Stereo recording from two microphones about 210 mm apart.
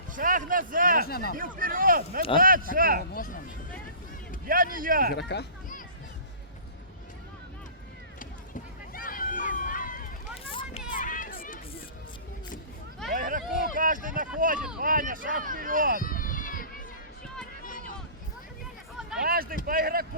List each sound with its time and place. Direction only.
0.1 s speech: 40° right (ahead or behind)
1.0 s speech: 45° left (ahead or behind)
1.4 s speech: 40° right (ahead or behind)
3.1 s speech: 45° left (ahead or behind)
4.4 s speech: 40° right (ahead or behind)
5.1 s speech: 50° left (ahead or behind)
8.9 s run: 40° left (ahead or behind)
10.5 s hubbub: 25° left (ahead or behind)
11.0 s a sound: 40° left (ahead or behind)
13.1 s a sound: 40° right (ahead or behind)
14.8 s speech: 40° right (ahead or behind)
16.0 s run: 40° left (ahead or behind)
19.2 s a sound: 45° right (ahead or behind)
19.6 s speech: 45° right (ahead or behind)